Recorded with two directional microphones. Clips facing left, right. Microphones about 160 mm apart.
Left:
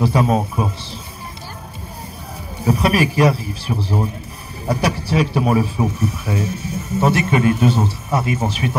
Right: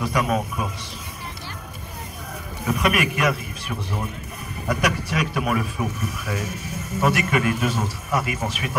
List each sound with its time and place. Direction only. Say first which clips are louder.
0.0 s speech: left 6 dB; 30° left (ahead or behind)
2.6 s a man's voice: left 5 dB; 30° left (ahead or behind)